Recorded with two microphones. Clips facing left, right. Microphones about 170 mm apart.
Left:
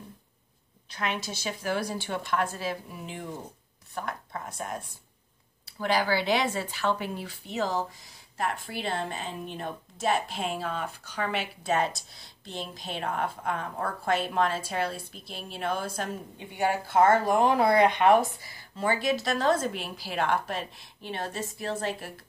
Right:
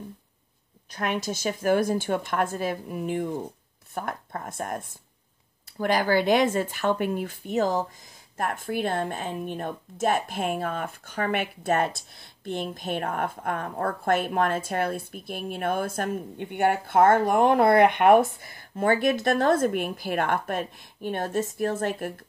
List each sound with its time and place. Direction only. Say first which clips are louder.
0.8 s a woman's voice: right 4 dB; 45° right (ahead or behind)